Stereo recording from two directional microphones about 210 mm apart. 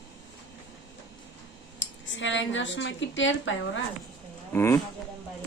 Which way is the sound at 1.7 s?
60° left (ahead or behind).